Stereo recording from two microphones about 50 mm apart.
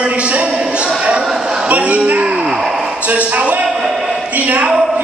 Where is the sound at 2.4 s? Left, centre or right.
Centre.